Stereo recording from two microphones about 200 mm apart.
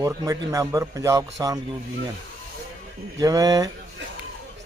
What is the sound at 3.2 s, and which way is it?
Speech, 20° right (ahead or behind).